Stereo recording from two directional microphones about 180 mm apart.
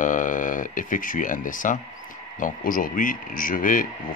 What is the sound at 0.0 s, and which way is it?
Speech, 45° left (ahead or behind).